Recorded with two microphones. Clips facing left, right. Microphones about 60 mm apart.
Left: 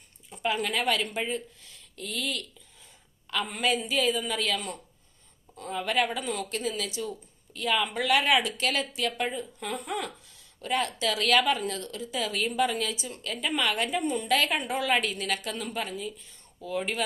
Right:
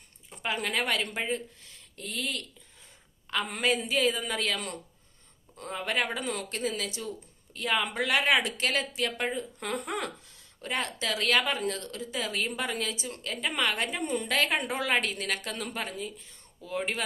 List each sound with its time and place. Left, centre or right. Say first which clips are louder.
0.3 s speech: left 3 dB; right
3.5 s speech: left 1 dB; right
5.7 s speech: left 3 dB; right
10.6 s speech: left 4 dB; right
11.7 s speech: left 1 dB; right
12.7 s speech: left 2 dB; right
14.1 s speech: left 1 dB; right
14.5 s a woman's voice: left 1 dB; right
15.1 s speech: left 2 dB; right